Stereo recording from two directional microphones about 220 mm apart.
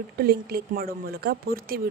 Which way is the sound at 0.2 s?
45° right (ahead or behind).